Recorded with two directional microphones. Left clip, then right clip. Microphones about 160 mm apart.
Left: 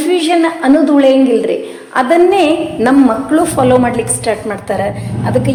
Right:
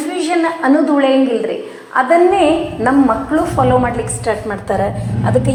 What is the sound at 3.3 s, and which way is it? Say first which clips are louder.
Speech: left 3 dB; 65° left (ahead or behind).